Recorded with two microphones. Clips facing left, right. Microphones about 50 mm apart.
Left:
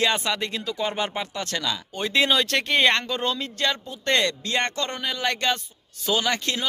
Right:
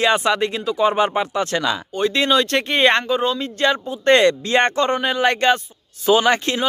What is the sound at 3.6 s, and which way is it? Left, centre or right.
Speech, centre.